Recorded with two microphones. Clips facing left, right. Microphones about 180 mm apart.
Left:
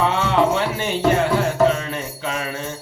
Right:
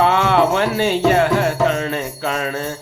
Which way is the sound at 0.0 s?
65° right (ahead or behind).